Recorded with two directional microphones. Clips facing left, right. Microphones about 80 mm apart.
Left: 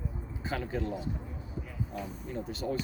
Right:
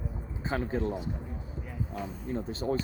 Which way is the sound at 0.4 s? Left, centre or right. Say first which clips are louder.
Right 3 dB; right.